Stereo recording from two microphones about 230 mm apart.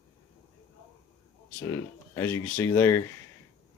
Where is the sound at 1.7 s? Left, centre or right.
Centre.